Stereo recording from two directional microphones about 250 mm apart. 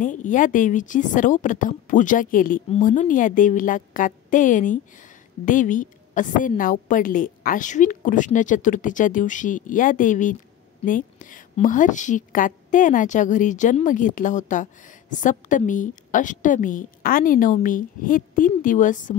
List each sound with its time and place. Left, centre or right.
0.0 s a woman's voice: left